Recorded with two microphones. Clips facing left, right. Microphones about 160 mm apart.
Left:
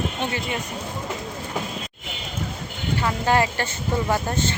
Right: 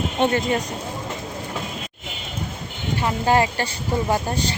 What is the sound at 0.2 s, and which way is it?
Speech, 50° right (ahead or behind).